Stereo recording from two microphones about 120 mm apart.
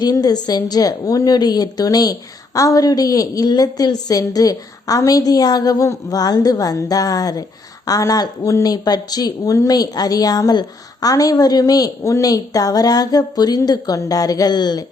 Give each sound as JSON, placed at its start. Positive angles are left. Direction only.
{"t": 0.0, "sound": "speech", "side_deg": 30}